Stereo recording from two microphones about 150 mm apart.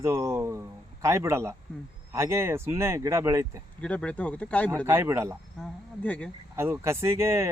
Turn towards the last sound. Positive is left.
turn(degrees=-20)  # may be behind; listen again after turning